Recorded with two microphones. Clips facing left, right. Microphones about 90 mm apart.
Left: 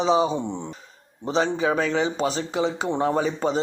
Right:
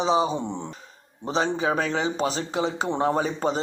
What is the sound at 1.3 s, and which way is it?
Speech, 35° right (ahead or behind).